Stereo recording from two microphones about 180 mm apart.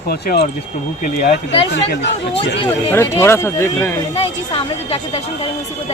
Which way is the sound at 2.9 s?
15° left (ahead or behind).